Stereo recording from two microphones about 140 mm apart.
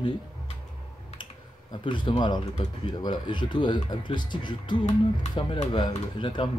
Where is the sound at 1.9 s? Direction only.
35° left (ahead or behind).